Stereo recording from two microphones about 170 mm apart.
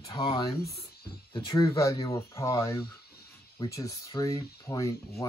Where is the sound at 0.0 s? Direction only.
25° left (ahead or behind).